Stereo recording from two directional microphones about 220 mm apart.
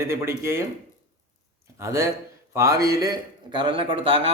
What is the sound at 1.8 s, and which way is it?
A man's voice, 15° right (ahead or behind).